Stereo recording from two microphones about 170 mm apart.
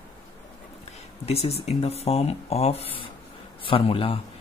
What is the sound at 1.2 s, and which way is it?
Speech, 35° left (ahead or behind).